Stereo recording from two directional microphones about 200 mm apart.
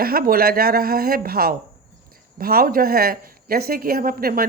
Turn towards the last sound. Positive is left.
turn(degrees=-45)  # may be behind; listen again after turning